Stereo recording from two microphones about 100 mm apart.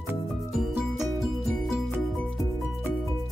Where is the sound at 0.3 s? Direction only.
Centre (ahead or behind).